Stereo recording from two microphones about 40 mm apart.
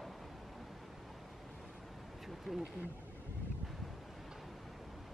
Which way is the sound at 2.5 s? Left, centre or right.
Centre.